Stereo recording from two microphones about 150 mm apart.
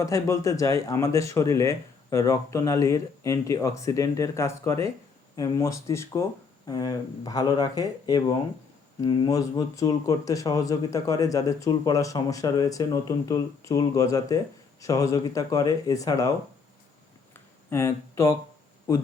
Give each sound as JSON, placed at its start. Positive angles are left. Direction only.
{"t": 0.0, "sound": "speech", "side_deg": 20}
{"t": 17.7, "sound": "speech", "side_deg": 15}